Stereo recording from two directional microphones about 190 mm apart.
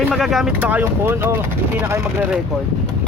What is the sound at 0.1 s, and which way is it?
Speech, centre (ahead or behind).